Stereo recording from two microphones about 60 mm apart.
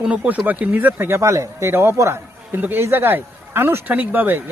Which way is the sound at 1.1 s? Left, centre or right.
Right.